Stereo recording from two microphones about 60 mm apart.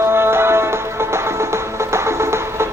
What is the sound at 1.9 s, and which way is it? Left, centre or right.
Music, right.